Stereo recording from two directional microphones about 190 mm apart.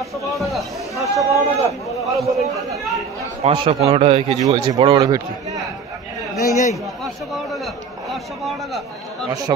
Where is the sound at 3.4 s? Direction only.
30° right (ahead or behind).